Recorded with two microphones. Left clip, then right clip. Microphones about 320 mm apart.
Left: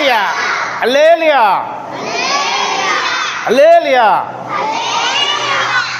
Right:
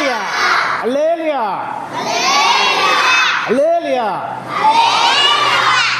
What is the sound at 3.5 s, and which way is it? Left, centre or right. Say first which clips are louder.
Speech: left 6 dB; left.